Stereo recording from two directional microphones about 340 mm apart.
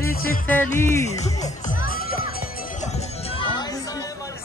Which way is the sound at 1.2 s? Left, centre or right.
Left.